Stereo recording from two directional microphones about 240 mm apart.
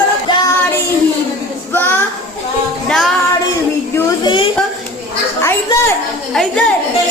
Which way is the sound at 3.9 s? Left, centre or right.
Centre.